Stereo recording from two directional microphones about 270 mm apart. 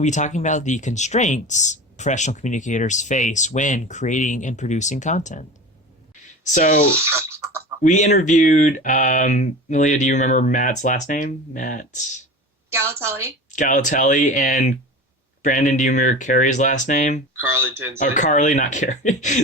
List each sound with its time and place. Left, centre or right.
0.0 s speech: left
6.9 s scratch: centre
7.8 s speech: left
12.7 s a woman's voice: centre
13.5 s speech: left
17.4 s a woman's voice: centre
17.9 s speech: left